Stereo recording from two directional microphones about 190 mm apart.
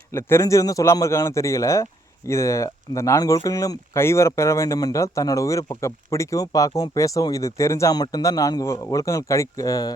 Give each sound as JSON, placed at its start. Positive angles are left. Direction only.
{"t": 0.1, "sound": "a man's voice", "side_deg": 15}